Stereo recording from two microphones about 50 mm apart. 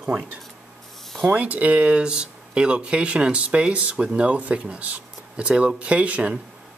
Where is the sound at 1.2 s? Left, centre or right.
Right.